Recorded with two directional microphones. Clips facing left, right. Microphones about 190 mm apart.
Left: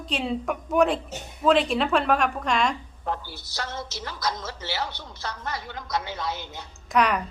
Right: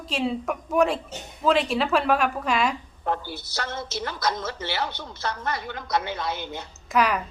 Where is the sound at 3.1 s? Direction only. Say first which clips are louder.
Right 3 dB; 60° right (ahead or behind).